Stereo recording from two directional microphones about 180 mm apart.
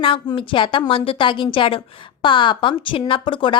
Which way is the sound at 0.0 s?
30° left (ahead or behind).